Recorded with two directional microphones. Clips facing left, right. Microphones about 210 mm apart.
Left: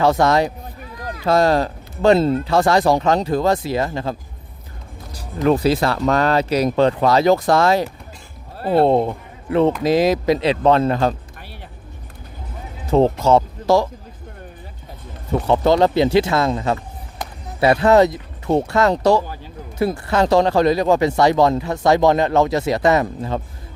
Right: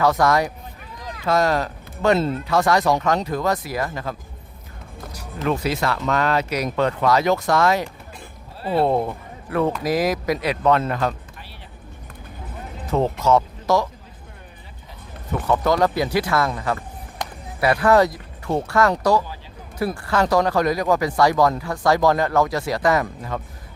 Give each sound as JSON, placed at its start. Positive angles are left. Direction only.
{"t": 0.0, "sound": "speech", "side_deg": 25}
{"t": 5.5, "sound": "speech", "side_deg": 35}
{"t": 8.5, "sound": "a sound", "side_deg": 50}
{"t": 8.8, "sound": "speech", "side_deg": 25}
{"t": 12.9, "sound": "speech", "side_deg": 30}
{"t": 15.3, "sound": "speech", "side_deg": 25}